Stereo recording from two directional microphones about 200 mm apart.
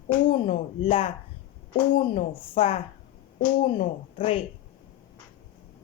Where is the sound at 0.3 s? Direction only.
25° left (ahead or behind).